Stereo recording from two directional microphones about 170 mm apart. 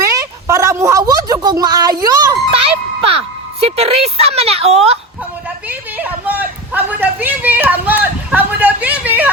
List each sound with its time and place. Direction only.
0.1 s a woman's voice: 20° right (ahead or behind)
3.8 s a woman's voice: 35° right (ahead or behind)
5.6 s a sound: 10° right (ahead or behind)